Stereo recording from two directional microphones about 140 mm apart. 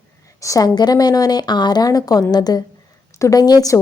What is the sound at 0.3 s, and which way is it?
A woman's voice, 25° left (ahead or behind).